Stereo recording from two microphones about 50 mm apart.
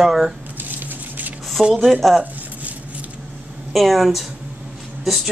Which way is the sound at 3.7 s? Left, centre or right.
Centre.